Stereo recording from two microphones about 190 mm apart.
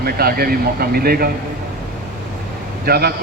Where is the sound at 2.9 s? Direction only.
55° right (ahead or behind).